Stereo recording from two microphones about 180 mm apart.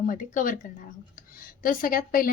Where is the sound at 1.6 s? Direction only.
50° left (ahead or behind).